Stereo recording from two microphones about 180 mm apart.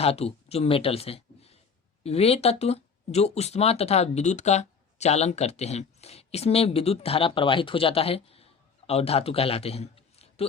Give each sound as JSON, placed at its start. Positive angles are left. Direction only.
{"t": 0.0, "sound": "a man's voice", "side_deg": 35}